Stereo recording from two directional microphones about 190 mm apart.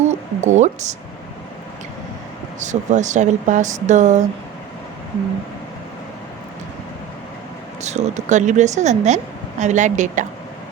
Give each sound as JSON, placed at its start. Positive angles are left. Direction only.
{"t": 0.0, "sound": "speech", "side_deg": -40}
{"t": 2.6, "sound": "speech", "side_deg": -40}
{"t": 7.8, "sound": "speech", "side_deg": -35}